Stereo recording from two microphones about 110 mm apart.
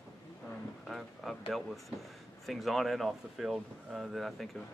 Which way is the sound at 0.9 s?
Centre (ahead or behind).